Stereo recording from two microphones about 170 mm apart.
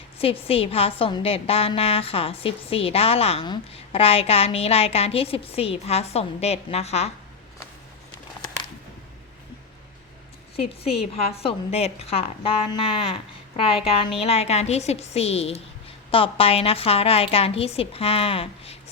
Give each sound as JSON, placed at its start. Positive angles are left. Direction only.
{"t": 0.2, "sound": "a woman's voice", "side_deg": 35}
{"t": 10.6, "sound": "a woman's voice", "side_deg": 35}